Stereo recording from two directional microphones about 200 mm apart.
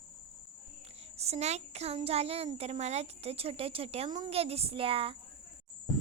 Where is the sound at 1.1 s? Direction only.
30° right (ahead or behind).